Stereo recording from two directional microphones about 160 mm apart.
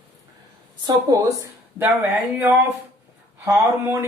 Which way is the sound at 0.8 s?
25° right (ahead or behind).